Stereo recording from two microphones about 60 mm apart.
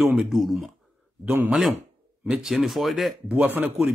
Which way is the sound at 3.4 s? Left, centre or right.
Right.